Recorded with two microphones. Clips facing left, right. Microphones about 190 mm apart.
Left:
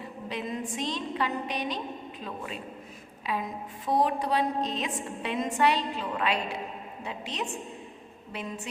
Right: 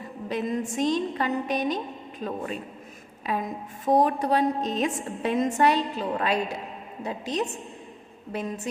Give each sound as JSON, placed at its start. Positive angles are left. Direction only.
{"t": 0.3, "sound": "a woman's voice", "side_deg": -45}